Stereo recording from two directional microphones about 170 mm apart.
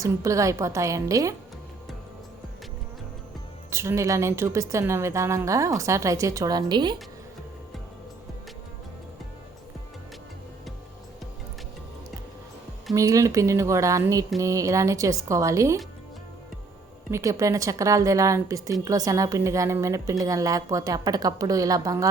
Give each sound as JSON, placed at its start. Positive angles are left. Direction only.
{"t": 0.0, "sound": "speech", "side_deg": -20}
{"t": 3.7, "sound": "a woman's voice", "side_deg": -15}
{"t": 12.9, "sound": "a woman's voice", "side_deg": -20}
{"t": 17.1, "sound": "speech", "side_deg": -15}